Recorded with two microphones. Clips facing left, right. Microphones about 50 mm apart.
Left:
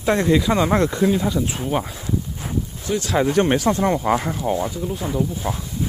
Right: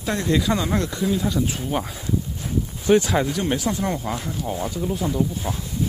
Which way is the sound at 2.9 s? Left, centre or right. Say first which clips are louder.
Right 8 dB; right.